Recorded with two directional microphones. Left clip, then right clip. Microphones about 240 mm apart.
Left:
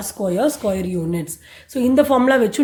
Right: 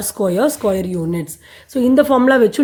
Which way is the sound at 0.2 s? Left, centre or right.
Right.